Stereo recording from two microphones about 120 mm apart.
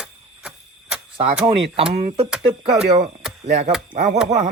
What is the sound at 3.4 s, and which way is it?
Speech, 75° right (ahead or behind).